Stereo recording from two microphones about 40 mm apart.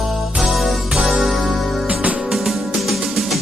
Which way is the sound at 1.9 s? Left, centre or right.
Right.